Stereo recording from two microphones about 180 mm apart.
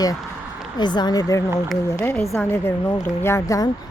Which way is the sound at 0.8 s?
25° left (ahead or behind).